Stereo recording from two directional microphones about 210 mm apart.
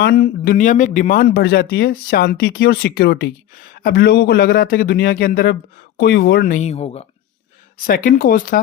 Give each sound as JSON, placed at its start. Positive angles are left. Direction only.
{"t": 0.0, "sound": "speech", "side_deg": 45}
{"t": 7.8, "sound": "speech", "side_deg": 40}